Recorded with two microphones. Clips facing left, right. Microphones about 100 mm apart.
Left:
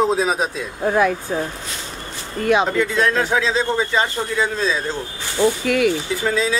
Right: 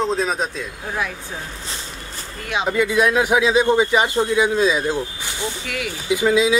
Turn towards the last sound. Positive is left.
turn(degrees=-10)  # may be behind; listen again after turning